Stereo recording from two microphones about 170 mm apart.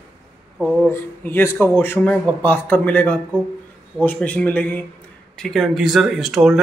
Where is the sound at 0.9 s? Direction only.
15° left (ahead or behind).